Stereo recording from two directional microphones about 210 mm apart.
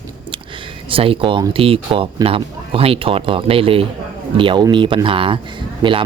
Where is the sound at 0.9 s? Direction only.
25° right (ahead or behind).